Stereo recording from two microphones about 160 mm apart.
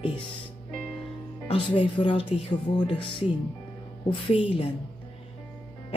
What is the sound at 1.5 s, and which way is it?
Speech, 30° left (ahead or behind).